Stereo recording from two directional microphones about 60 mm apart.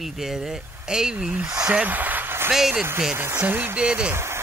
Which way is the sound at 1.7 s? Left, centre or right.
Right.